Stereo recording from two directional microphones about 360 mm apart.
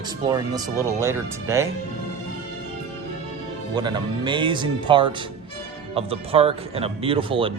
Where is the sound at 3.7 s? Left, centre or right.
Centre.